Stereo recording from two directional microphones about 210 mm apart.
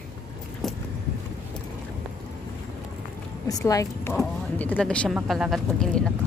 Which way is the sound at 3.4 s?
15° left (ahead or behind).